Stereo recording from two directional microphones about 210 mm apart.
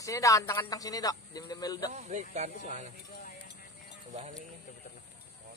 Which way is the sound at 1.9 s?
35° right (ahead or behind).